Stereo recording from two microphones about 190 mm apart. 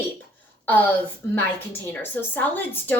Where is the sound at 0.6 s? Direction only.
10° left (ahead or behind).